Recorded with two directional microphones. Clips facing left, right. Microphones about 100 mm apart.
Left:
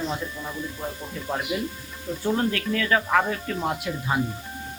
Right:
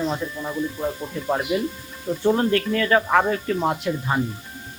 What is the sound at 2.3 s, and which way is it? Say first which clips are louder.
Speech: right 3 dB; 5° right (ahead or behind).